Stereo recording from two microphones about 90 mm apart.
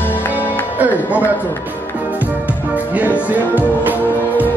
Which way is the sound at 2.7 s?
15° right (ahead or behind).